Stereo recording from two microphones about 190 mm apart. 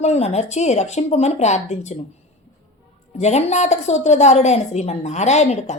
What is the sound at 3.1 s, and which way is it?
A woman's voice, 35° left (ahead or behind).